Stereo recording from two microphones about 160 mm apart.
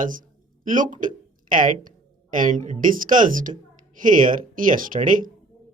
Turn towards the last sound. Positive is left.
turn(degrees=-55)  # may be behind; listen again after turning